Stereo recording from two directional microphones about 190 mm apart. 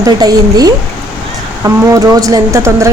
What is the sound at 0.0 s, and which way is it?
A woman's voice, 20° right (ahead or behind).